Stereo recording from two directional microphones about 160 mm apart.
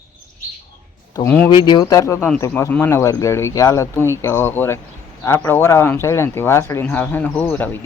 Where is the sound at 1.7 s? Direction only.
25° left (ahead or behind).